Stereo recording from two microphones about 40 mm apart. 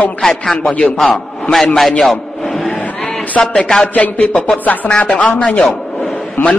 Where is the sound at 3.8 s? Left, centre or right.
Left.